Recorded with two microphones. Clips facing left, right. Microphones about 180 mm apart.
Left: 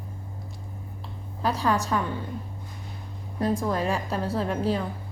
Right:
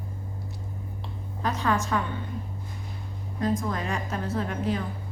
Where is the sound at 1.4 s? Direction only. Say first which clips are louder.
Left 2 dB; 35° left (ahead or behind).